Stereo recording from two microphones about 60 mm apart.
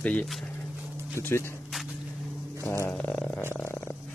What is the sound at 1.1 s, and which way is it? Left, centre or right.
Speech, left.